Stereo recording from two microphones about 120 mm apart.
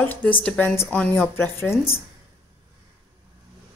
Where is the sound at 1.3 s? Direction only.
20° left (ahead or behind).